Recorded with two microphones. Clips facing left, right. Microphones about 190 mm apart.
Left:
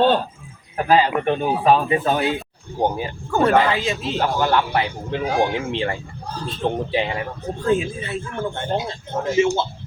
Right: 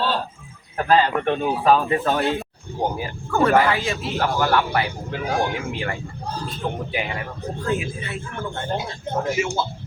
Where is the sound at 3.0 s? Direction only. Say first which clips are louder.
Left 1 dB; 25° left (ahead or behind).